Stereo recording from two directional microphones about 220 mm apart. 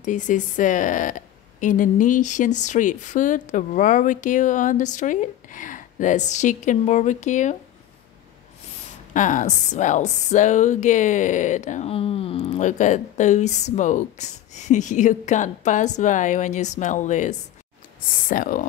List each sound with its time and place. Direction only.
0.0 s a woman's voice: 35° left (ahead or behind)
9.1 s a woman's voice: 35° left (ahead or behind)